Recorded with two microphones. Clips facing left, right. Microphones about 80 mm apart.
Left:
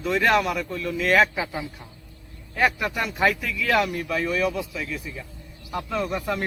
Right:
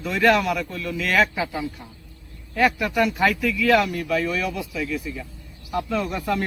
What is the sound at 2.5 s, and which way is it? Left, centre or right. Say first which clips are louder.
A man's voice: right 3 dB; left.